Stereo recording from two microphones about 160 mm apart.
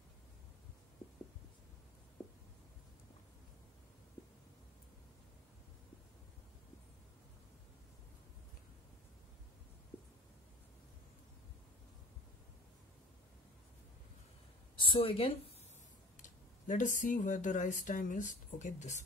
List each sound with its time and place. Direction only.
14.8 s a woman's voice: 35° left (ahead or behind)
16.2 s speech: 50° left (ahead or behind)